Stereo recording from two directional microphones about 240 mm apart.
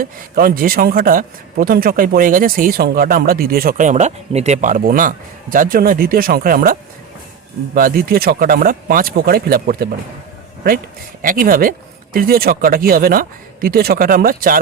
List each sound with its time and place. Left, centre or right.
0.0 s speech: right
11.2 s speech: right